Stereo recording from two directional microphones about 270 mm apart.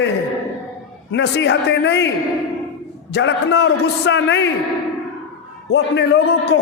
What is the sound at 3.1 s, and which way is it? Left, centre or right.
A man's voice, left.